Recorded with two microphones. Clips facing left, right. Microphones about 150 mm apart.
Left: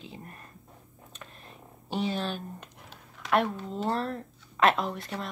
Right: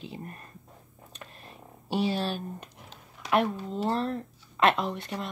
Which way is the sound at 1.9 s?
10° right (ahead or behind).